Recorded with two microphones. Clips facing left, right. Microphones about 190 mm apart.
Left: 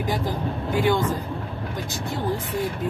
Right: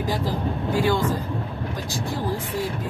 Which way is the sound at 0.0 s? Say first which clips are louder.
Right 1 dB; 20° left (ahead or behind).